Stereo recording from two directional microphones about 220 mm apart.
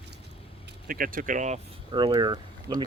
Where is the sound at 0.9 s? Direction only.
40° right (ahead or behind).